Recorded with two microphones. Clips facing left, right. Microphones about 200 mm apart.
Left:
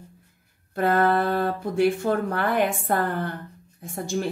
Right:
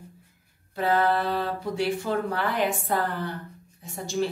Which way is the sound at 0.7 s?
50° left (ahead or behind).